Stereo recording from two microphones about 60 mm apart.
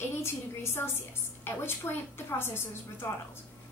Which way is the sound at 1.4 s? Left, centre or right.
Left.